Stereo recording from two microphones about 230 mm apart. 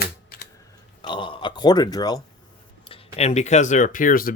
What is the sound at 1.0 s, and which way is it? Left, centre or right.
Speech, left.